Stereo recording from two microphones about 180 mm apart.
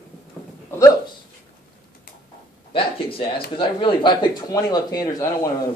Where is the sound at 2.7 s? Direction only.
30° left (ahead or behind).